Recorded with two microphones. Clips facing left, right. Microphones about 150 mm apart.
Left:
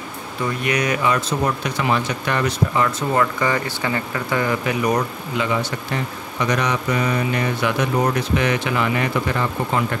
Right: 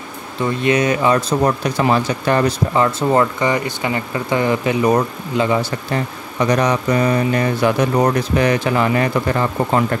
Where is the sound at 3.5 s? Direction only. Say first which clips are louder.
Right 3 dB; 20° right (ahead or behind).